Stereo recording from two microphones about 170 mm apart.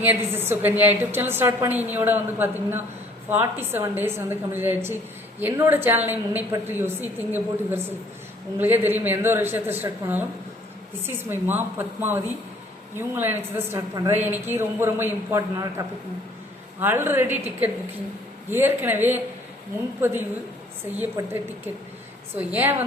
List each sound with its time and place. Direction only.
0.0 s a woman's voice: 10° right (ahead or behind)
16.8 s a woman's voice: 15° right (ahead or behind)
21.2 s a woman's voice: 20° right (ahead or behind)
22.4 s a woman's voice: 10° right (ahead or behind)